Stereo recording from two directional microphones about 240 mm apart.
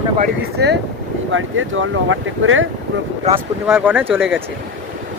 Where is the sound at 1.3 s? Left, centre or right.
Right.